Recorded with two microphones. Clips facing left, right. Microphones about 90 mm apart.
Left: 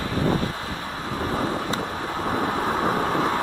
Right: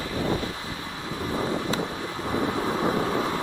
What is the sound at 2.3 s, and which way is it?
Vehicle, 40° left (ahead or behind).